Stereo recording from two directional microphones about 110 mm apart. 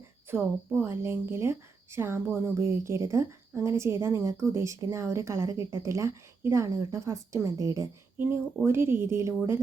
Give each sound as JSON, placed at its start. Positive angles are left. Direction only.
{"t": 0.3, "sound": "speech", "side_deg": -20}
{"t": 8.2, "sound": "speech", "side_deg": -20}